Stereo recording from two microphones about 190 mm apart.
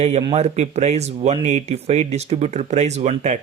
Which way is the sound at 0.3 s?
35° right (ahead or behind).